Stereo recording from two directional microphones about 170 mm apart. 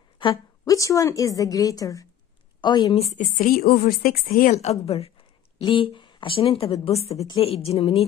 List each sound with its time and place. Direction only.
0.2 s a woman's voice: 25° left (ahead or behind)
3.3 s a woman's voice: 55° left (ahead or behind)
4.5 s a woman's voice: 40° left (ahead or behind)